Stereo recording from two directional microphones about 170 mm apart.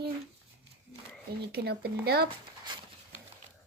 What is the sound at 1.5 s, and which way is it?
Speech, 65° right (ahead or behind).